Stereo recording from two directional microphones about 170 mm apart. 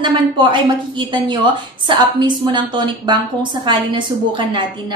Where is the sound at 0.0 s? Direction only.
30° right (ahead or behind).